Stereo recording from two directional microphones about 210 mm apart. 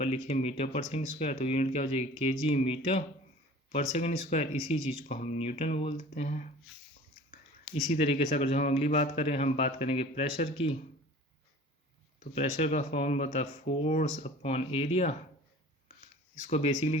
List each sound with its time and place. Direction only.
0.0 s speech: 30° left (ahead or behind)
7.9 s speech: 30° left (ahead or behind)
12.2 s speech: 30° left (ahead or behind)
16.3 s speech: 35° left (ahead or behind)